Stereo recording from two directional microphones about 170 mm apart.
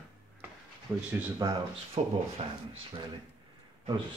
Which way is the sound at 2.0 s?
35° right (ahead or behind).